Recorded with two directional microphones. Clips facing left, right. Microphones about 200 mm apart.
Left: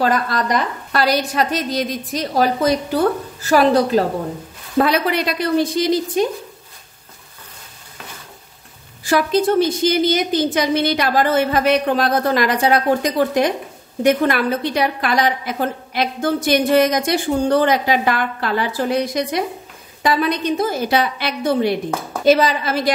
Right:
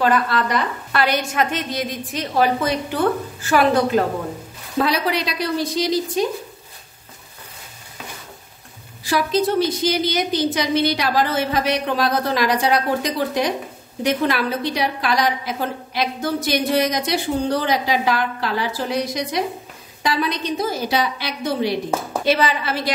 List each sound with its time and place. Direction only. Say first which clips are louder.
0.0 s a woman's voice: even; 40° left (ahead or behind)
4.7 s a woman's voice: left 3 dB; 55° left (ahead or behind)
9.0 s a woman's voice: left 3 dB; 50° left (ahead or behind)
22.2 s a woman's voice: left 7 dB; 45° left (ahead or behind)